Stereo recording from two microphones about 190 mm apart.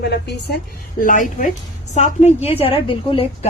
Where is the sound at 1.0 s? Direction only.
45° left (ahead or behind).